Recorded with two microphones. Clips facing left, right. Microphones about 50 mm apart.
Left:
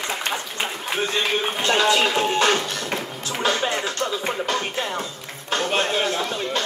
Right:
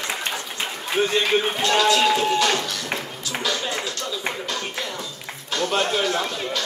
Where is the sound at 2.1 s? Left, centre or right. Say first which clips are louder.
Left 1 dB; left.